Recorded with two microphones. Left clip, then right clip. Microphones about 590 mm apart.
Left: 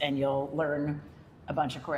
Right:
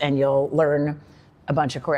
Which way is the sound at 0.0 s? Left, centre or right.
Right.